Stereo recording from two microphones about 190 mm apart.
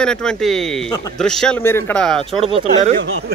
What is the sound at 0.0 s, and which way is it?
Speech, 5° left (ahead or behind).